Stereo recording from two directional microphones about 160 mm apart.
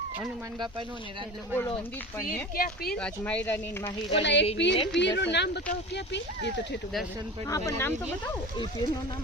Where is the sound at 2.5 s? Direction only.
70° left (ahead or behind).